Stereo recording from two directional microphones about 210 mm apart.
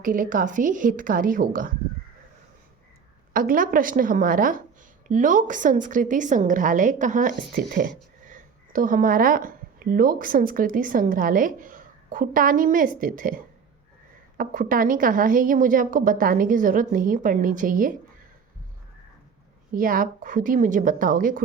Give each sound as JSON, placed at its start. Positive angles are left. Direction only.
{"t": 0.0, "sound": "a woman's voice", "side_deg": -40}
{"t": 3.3, "sound": "a woman's voice", "side_deg": -40}
{"t": 19.7, "sound": "a woman's voice", "side_deg": -40}